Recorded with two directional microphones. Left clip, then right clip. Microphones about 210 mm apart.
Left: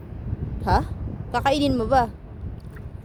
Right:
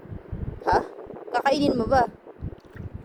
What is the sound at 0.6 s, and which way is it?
A woman's voice, 20° left (ahead or behind).